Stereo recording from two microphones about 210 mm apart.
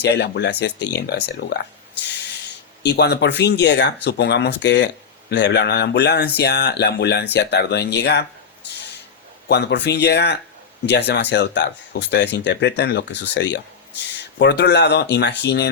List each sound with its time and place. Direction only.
0.0 s speech: 55° left (ahead or behind)
2.1 s snort: 55° left (ahead or behind)
2.8 s speech: 50° left (ahead or behind)
9.5 s speech: 55° left (ahead or behind)